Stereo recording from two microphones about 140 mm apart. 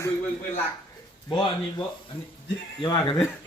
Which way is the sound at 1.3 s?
30° left (ahead or behind).